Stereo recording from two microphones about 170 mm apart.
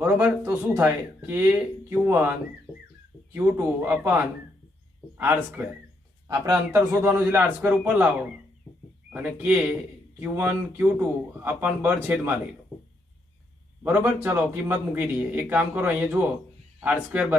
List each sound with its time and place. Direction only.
0.0 s speech: 10° right (ahead or behind)
9.1 s speech: 10° right (ahead or behind)
13.8 s speech: 15° right (ahead or behind)